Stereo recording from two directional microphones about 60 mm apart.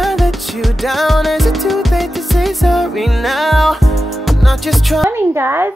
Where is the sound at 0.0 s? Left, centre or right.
Centre.